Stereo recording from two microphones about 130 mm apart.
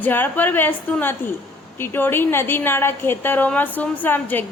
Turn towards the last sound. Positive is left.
turn(degrees=15)  # may be behind; listen again after turning